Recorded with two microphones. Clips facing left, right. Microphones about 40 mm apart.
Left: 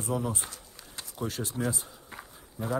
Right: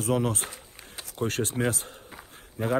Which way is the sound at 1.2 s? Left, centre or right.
Right.